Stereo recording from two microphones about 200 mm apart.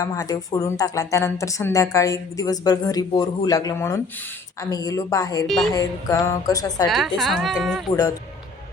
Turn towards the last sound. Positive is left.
turn(degrees=0)  # may be behind; listen again after turning